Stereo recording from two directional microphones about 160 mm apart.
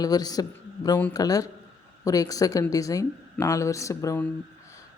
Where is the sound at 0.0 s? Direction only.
25° left (ahead or behind).